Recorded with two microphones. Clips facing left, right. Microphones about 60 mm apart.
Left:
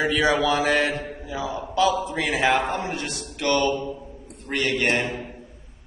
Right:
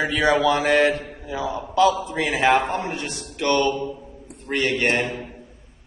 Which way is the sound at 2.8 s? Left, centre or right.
Right.